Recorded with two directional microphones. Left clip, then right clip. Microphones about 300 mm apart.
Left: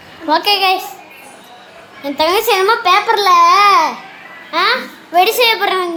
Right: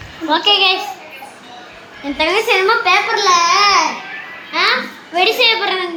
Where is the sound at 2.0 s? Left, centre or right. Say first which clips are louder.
Left 2 dB; centre.